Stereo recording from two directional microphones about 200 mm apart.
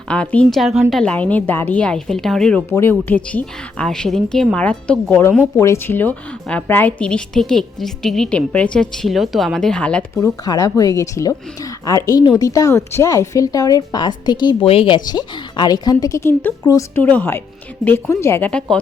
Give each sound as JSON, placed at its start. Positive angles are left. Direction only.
{"t": 0.1, "sound": "a woman's voice", "side_deg": 5}
{"t": 10.2, "sound": "a woman's voice", "side_deg": 15}